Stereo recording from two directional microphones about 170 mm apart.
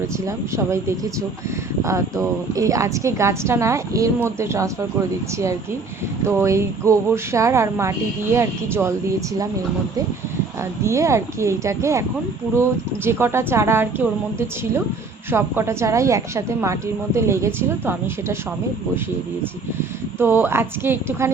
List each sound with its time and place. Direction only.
0.3 s a woman's voice: 15° right (ahead or behind)
10.8 s a woman's voice: 15° right (ahead or behind)
13.1 s a woman's voice: 15° right (ahead or behind)
15.3 s a woman's voice: 15° right (ahead or behind)
20.1 s a woman's voice: 15° right (ahead or behind)